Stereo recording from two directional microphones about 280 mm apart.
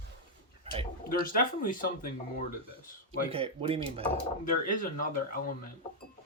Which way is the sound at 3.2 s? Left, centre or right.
Centre.